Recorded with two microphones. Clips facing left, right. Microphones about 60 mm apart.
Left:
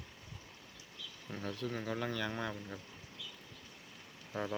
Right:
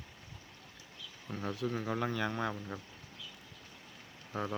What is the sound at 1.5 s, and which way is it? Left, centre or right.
Speech, centre.